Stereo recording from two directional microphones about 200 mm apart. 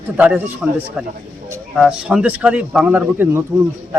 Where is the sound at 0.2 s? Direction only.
10° right (ahead or behind).